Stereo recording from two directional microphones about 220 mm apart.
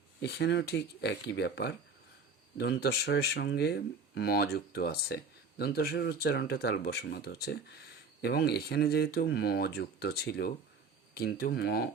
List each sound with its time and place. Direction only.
0.2 s speech: 50° left (ahead or behind)